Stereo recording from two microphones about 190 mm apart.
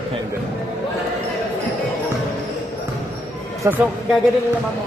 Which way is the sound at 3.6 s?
15° right (ahead or behind).